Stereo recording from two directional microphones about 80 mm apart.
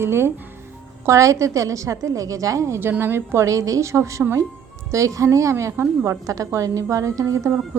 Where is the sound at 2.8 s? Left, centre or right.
Right.